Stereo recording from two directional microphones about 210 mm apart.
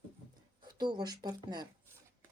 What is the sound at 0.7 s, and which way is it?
Speech, 20° right (ahead or behind).